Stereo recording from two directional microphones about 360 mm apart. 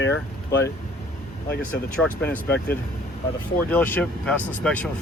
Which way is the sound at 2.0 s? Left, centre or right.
Centre.